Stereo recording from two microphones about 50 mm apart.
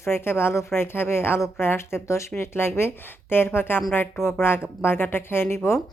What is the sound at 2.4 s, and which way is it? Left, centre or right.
A woman's voice, left.